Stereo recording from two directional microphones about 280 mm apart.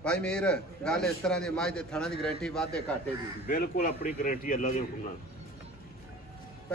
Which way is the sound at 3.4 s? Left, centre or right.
Left.